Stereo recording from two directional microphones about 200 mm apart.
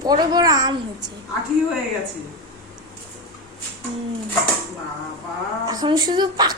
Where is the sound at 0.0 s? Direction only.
20° right (ahead or behind).